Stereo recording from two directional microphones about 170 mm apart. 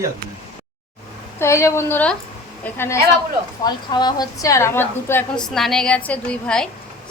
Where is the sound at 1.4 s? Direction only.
15° left (ahead or behind).